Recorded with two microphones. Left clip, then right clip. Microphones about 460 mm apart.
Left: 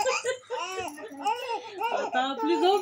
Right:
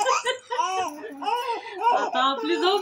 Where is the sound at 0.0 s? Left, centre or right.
Left.